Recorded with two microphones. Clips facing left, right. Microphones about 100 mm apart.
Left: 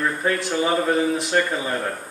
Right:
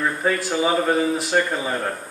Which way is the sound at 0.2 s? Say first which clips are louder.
Right 1 dB; 5° right (ahead or behind).